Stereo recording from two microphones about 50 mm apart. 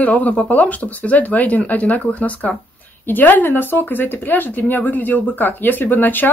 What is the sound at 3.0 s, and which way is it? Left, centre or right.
Speech, left.